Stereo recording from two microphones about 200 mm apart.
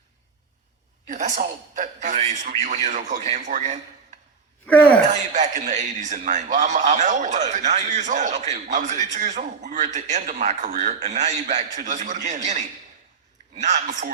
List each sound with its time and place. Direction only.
1.0 s a man's voice: 40° right (ahead or behind)
4.6 s speech: 5° left (ahead or behind)
5.0 s a man's voice: 35° right (ahead or behind)